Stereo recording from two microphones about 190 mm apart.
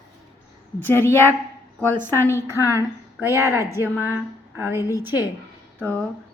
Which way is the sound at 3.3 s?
15° right (ahead or behind).